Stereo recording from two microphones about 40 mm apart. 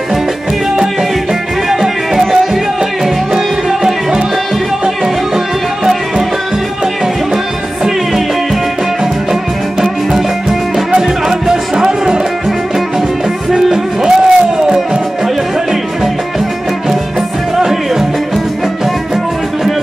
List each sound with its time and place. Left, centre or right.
1.7 s music: centre
4.8 s music: centre
9.3 s music: centre
13.5 s music: centre
17.6 s music: centre